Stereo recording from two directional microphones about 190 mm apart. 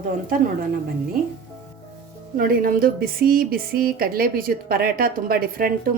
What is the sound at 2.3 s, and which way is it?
Speech, 50° right (ahead or behind).